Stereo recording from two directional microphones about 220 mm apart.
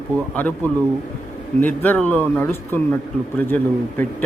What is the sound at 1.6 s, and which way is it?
A man's voice, 10° left (ahead or behind).